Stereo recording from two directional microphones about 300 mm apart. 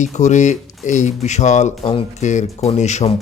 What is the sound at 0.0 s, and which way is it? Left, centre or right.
Speech, left.